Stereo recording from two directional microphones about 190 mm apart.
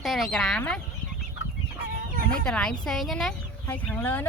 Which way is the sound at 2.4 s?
5° left (ahead or behind).